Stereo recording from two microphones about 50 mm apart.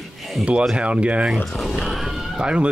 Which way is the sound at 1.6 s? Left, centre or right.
Centre.